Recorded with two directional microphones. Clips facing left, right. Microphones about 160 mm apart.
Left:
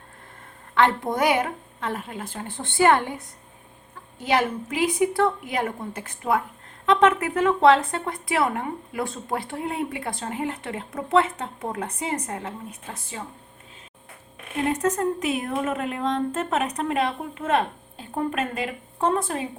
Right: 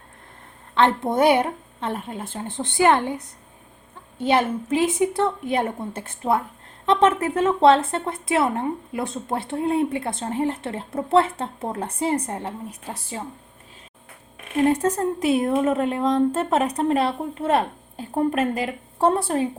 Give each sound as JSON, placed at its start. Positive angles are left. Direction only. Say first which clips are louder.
{"t": 0.7, "sound": "speech", "louder": "right 2 dB", "side_deg": -25}
{"t": 4.2, "sound": "speech", "louder": "right 3 dB", "side_deg": -25}
{"t": 14.7, "sound": "speech", "louder": "right 2 dB", "side_deg": -30}